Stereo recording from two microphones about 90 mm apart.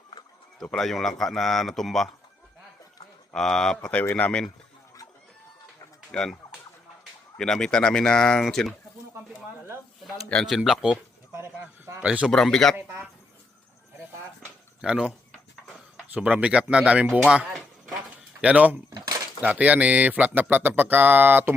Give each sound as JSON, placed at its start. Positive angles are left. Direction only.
{"t": 0.6, "sound": "speech", "side_deg": 5}
{"t": 3.3, "sound": "speech", "side_deg": 5}
{"t": 6.1, "sound": "turkey", "side_deg": 10}
{"t": 7.3, "sound": "speech", "side_deg": 10}
{"t": 10.4, "sound": "speech", "side_deg": 0}
{"t": 12.0, "sound": "speech", "side_deg": -10}
{"t": 12.3, "sound": "speech", "side_deg": 5}
{"t": 12.7, "sound": "speech", "side_deg": -20}
{"t": 14.8, "sound": "speech", "side_deg": -10}
{"t": 16.1, "sound": "speech", "side_deg": -15}